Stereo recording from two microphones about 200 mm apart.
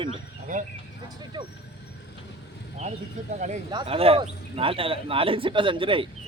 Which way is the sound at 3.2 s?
35° right (ahead or behind).